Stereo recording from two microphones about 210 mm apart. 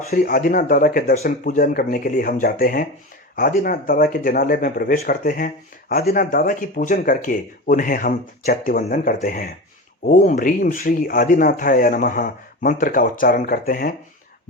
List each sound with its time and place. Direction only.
0.1 s speech: 45° left (ahead or behind)